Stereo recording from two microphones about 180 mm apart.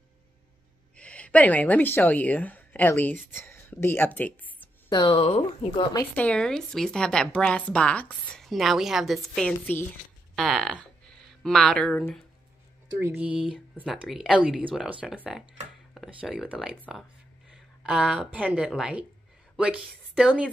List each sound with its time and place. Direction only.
0.9 s speech: 5° left (ahead or behind)
4.8 s a woman's voice: 25° left (ahead or behind)
6.1 s a woman's voice: 5° left (ahead or behind)
13.0 s a woman's voice: 5° right (ahead or behind)